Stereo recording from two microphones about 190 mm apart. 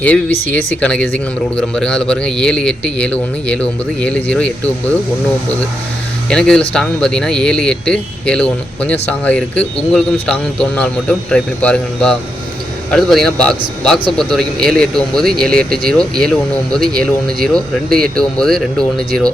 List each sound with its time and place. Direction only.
0.0 s speech: 5° left (ahead or behind)
6.2 s speech: 5° left (ahead or behind)